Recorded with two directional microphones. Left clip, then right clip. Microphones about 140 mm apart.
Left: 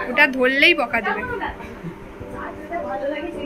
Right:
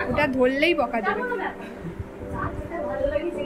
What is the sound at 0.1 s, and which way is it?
Speech, 10° right (ahead or behind).